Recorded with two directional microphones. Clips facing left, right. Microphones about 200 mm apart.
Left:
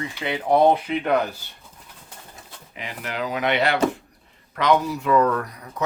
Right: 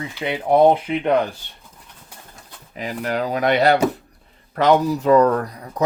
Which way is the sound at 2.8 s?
40° right (ahead or behind).